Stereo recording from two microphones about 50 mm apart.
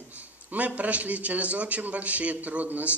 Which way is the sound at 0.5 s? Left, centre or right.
Right.